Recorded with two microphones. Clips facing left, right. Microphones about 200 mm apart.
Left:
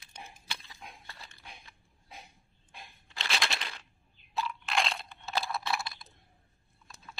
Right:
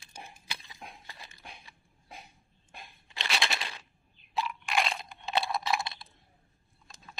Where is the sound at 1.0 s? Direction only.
20° right (ahead or behind).